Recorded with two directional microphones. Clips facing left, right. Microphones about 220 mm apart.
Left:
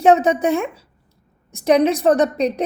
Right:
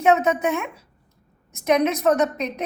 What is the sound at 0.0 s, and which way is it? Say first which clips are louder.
A woman's voice: left 4 dB; 35° left (ahead or behind).